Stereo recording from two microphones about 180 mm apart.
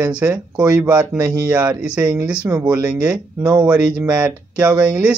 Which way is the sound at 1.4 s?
5° right (ahead or behind).